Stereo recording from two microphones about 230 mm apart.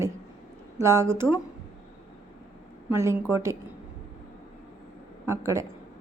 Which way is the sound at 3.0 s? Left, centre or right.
Centre.